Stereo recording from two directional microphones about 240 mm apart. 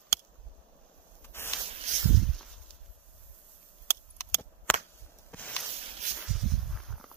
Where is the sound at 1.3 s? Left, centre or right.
Centre.